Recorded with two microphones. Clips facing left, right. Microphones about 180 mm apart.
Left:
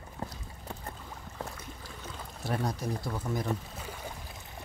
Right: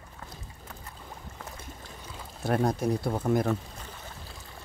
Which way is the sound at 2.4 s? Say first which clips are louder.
Right 7 dB; 55° right (ahead or behind).